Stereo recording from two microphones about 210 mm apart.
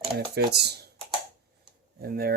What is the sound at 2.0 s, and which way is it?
Speech, 45° right (ahead or behind).